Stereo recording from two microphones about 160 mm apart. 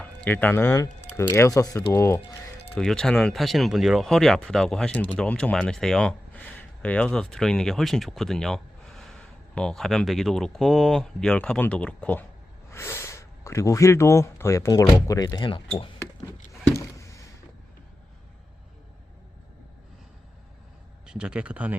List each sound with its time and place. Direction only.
0.0 s speech: 10° left (ahead or behind)
2.7 s speech: 5° left (ahead or behind); by 15.6 s 30° left (ahead or behind)
16.5 s a sound: 20° left (ahead or behind)
21.1 s speech: 5° right (ahead or behind)